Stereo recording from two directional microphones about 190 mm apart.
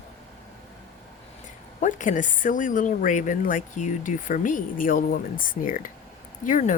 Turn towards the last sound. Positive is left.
turn(degrees=40)  # may be behind; listen again after turning